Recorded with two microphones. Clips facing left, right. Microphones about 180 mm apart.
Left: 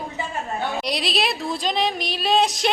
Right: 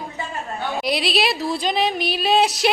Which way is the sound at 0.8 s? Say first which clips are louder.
Right 7 dB; centre (ahead or behind).